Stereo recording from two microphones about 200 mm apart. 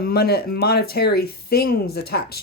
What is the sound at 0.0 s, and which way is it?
Speech, 50° left (ahead or behind).